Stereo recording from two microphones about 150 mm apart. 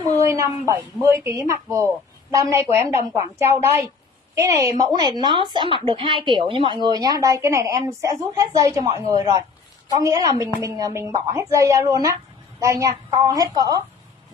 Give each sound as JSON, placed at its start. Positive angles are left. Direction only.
{"t": 0.1, "sound": "speech", "side_deg": -20}